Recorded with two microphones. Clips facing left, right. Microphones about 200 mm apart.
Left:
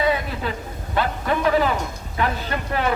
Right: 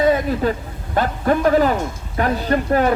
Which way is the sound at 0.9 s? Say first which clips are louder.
Right 5 dB; 45° right (ahead or behind).